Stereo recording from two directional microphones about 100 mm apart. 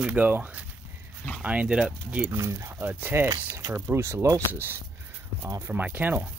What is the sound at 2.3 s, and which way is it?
Speech, 25° right (ahead or behind).